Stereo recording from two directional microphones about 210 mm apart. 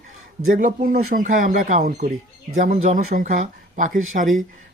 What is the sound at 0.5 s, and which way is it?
Speech, 40° right (ahead or behind).